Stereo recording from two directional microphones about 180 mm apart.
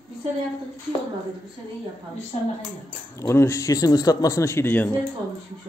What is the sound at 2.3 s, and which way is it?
Speech, 35° left (ahead or behind).